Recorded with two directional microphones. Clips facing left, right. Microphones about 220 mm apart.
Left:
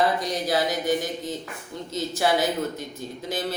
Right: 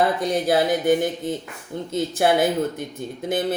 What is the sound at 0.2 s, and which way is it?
Speech, 55° right (ahead or behind).